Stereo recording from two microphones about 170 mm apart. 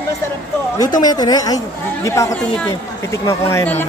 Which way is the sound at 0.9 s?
25° left (ahead or behind).